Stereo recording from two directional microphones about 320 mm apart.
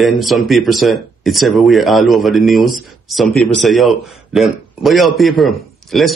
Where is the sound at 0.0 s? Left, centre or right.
Centre.